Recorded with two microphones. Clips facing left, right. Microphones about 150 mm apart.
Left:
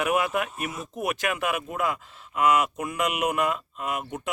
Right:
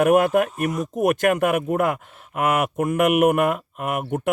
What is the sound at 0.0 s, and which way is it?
Speech, 50° right (ahead or behind).